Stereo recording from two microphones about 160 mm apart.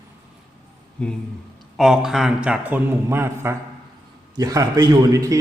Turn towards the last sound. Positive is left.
turn(degrees=-20)  # may be behind; listen again after turning